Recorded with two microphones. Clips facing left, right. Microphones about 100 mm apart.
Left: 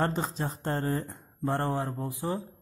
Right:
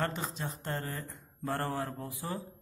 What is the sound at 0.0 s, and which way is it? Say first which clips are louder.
Speech: left 6 dB; 35° left (ahead or behind).